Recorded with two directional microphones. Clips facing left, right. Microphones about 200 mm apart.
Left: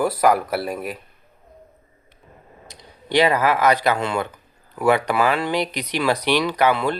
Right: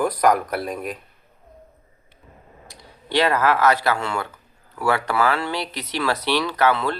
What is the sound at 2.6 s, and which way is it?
Speech, 20° left (ahead or behind).